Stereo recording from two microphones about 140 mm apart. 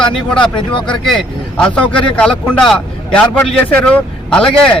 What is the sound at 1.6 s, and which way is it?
Speech, 10° left (ahead or behind).